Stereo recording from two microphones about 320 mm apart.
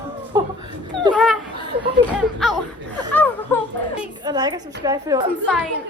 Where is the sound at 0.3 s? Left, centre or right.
Centre.